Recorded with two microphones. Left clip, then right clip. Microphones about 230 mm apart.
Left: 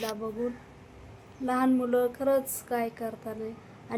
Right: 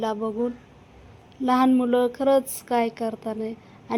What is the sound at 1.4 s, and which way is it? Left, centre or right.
Speech, right.